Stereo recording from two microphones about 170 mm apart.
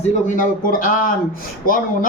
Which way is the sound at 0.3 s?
50° left (ahead or behind).